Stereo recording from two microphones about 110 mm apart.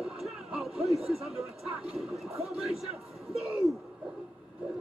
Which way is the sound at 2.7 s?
65° right (ahead or behind).